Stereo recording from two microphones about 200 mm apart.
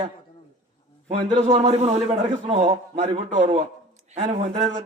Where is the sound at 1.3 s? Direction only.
30° right (ahead or behind).